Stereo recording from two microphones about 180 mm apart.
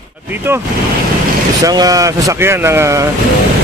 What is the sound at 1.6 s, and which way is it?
Speech, 20° right (ahead or behind).